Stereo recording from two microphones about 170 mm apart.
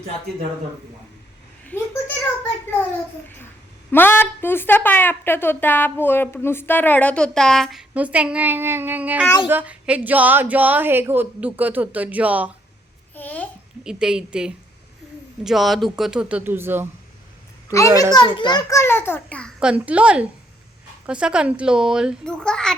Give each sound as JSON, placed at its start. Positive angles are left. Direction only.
{"t": 1.6, "sound": "a sound", "side_deg": 10}
{"t": 3.9, "sound": "a woman's voice", "side_deg": 10}
{"t": 13.1, "sound": "babbling", "side_deg": 10}
{"t": 13.8, "sound": "a child's voice", "side_deg": -5}
{"t": 17.7, "sound": "a woman's voice", "side_deg": 20}
{"t": 19.5, "sound": "a woman's voice", "side_deg": -5}